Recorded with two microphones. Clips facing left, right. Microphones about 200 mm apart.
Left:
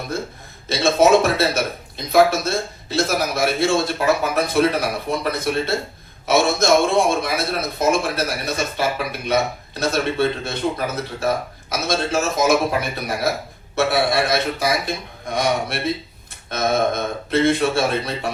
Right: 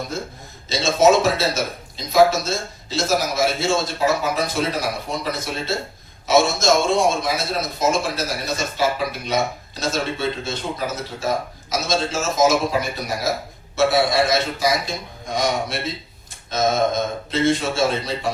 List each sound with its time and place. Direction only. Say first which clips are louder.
0.7 s speech: left 1 dB; 60° left (ahead or behind)